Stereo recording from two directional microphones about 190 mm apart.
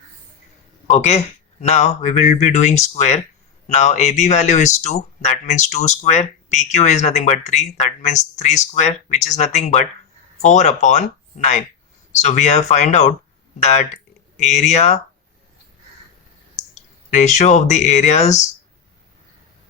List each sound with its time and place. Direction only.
0.9 s speech: 35° left (ahead or behind)
17.1 s speech: 40° left (ahead or behind)